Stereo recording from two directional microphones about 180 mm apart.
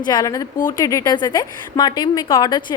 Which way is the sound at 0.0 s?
20° left (ahead or behind).